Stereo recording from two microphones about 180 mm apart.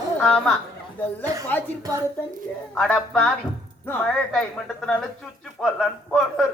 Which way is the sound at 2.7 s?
5° left (ahead or behind).